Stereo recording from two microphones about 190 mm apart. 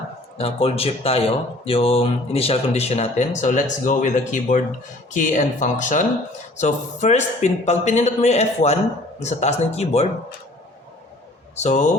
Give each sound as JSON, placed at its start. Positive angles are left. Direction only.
{"t": 0.3, "sound": "speech", "side_deg": 30}
{"t": 11.5, "sound": "speech", "side_deg": 40}